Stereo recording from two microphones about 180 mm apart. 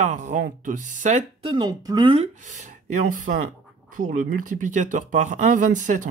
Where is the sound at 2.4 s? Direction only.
40° right (ahead or behind).